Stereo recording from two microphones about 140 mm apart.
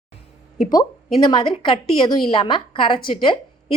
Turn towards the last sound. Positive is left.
turn(degrees=35)  # may be behind; listen again after turning